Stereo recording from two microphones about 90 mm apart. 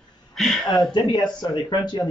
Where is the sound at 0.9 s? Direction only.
55° left (ahead or behind).